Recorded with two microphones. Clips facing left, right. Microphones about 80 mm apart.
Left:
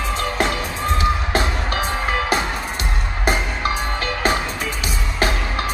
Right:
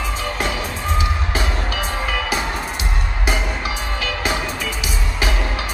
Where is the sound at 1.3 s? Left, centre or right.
Left.